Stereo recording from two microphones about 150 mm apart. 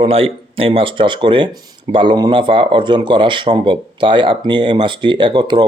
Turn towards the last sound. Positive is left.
turn(degrees=-30)  # may be behind; listen again after turning